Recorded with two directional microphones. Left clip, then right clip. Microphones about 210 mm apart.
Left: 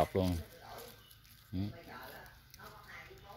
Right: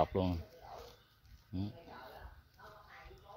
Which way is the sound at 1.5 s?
5° right (ahead or behind).